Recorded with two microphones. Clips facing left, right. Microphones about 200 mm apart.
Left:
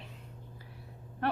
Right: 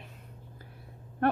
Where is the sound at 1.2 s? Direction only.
50° right (ahead or behind).